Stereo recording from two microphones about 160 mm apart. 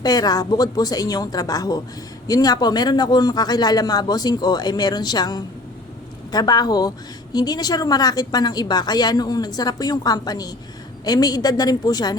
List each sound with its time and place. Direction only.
0.0 s speech: 25° left (ahead or behind)